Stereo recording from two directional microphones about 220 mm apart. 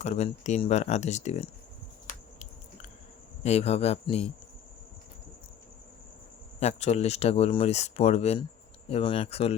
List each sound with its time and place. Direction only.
0.0 s speech: 30° left (ahead or behind)
3.4 s speech: 30° left (ahead or behind)
6.6 s speech: 30° left (ahead or behind)